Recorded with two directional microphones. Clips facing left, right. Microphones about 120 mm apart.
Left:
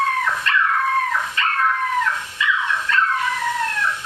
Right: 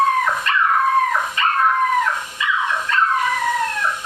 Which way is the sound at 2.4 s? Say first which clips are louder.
Even; 35° right (ahead or behind).